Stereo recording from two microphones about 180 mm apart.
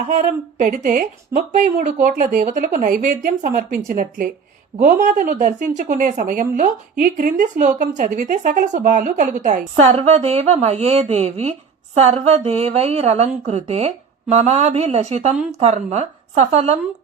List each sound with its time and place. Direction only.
0.2 s a woman's voice: 45° right (ahead or behind)